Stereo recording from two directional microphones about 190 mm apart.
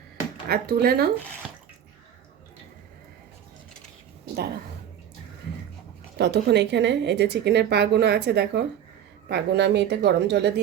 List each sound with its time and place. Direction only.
0.4 s a woman's voice: 55° right (ahead or behind)
6.1 s a woman's voice: 65° right (ahead or behind)